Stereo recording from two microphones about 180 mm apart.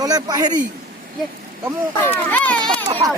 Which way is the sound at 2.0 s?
10° left (ahead or behind).